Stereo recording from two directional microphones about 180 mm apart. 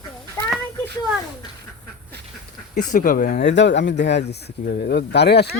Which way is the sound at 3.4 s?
80° left.